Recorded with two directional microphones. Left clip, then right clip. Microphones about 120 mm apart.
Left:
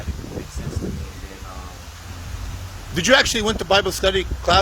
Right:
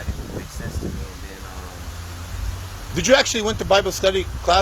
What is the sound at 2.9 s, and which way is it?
Speech, 40° left (ahead or behind).